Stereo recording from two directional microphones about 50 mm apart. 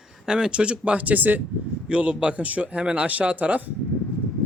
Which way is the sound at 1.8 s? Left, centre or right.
Right.